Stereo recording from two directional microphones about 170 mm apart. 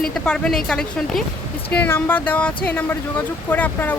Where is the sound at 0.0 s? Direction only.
5° left (ahead or behind).